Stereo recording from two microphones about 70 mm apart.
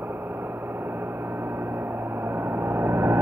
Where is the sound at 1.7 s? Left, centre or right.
Right.